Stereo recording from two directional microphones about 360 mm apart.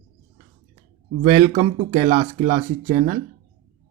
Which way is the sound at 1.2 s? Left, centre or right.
Centre.